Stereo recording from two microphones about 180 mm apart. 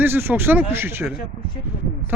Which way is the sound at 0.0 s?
10° right (ahead or behind).